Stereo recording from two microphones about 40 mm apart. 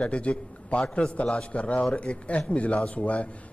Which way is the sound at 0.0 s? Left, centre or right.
Left.